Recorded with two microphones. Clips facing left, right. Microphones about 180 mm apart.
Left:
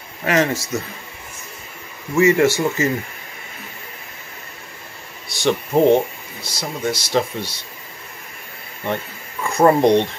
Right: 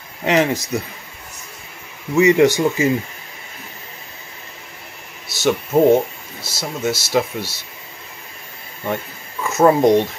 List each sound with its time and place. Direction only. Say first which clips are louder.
0.2 s speech: right 2 dB; 15° right (ahead or behind)
2.1 s speech: right 2 dB; 20° right (ahead or behind)
5.3 s speech: right 1 dB; 5° right (ahead or behind)
8.8 s speech: even; 5° right (ahead or behind)